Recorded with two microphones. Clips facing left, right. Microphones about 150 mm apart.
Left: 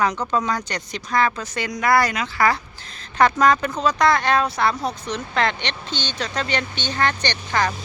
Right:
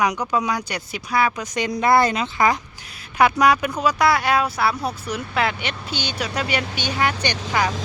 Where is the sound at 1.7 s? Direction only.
25° right (ahead or behind); by 7.7 s 10° right (ahead or behind).